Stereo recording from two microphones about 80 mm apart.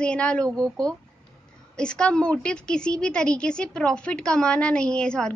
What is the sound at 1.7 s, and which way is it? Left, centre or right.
A woman's voice, centre.